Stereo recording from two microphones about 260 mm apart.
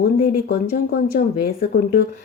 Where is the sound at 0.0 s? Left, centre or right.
Left.